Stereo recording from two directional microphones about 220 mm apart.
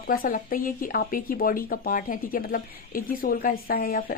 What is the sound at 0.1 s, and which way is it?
Speech, 40° left (ahead or behind).